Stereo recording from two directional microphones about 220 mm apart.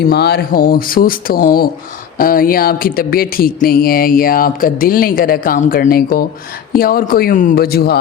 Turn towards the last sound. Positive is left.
turn(degrees=45)  # may be behind; listen again after turning